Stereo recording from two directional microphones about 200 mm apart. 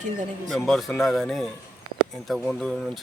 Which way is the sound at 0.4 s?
Centre (ahead or behind).